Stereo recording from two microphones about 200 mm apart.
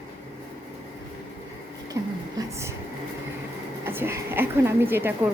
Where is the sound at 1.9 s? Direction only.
15° right (ahead or behind).